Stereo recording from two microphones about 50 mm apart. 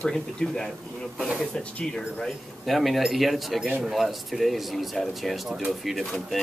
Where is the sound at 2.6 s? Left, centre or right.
Centre.